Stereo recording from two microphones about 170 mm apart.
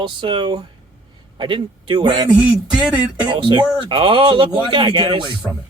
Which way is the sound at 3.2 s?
25° right (ahead or behind).